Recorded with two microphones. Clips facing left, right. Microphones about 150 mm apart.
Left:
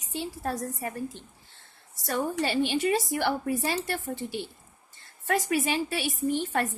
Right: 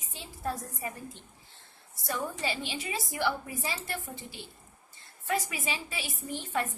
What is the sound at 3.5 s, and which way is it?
Speech, 80° left.